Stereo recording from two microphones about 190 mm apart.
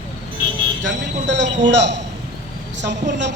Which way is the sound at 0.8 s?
70° right (ahead or behind).